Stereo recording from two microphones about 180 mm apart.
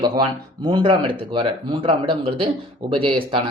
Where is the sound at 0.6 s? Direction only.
25° right (ahead or behind).